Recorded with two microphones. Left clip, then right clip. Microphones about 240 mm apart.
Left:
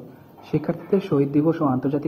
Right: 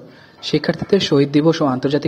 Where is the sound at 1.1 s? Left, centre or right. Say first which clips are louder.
Right 5 dB; right.